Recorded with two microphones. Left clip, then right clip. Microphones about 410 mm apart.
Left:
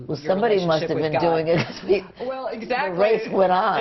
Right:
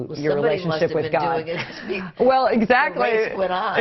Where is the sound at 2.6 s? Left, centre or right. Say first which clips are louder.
Right 2 dB; right.